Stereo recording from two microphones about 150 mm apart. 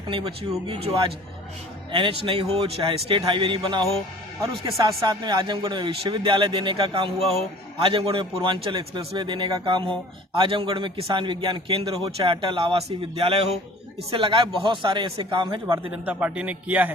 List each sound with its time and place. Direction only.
0.1 s speech: 35° right (ahead or behind)
1.9 s speech: 35° right (ahead or behind)
15.9 s a man's voice: 10° right (ahead or behind)